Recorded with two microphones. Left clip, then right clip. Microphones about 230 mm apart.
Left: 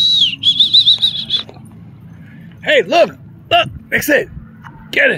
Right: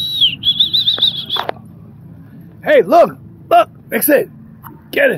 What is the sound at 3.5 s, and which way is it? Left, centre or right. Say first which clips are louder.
Speech: right 2 dB; right.